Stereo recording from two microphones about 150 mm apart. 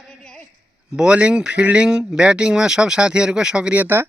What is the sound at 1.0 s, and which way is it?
Speech, 5° right (ahead or behind).